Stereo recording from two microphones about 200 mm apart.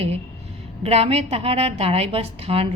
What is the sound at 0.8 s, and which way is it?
A woman's voice, 30° right (ahead or behind).